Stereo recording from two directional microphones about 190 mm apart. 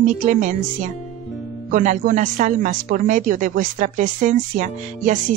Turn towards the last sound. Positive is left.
turn(degrees=-40)  # may be behind; listen again after turning